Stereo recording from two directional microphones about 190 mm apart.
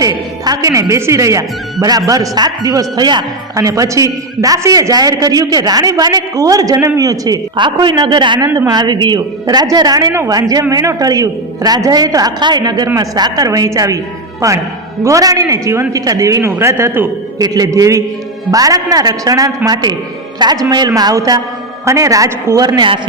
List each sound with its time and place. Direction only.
0.0 s a man's voice: 20° right (ahead or behind)